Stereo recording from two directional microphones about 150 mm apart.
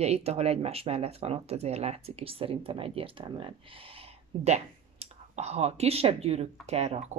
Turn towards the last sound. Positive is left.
turn(degrees=-45)  # may be behind; listen again after turning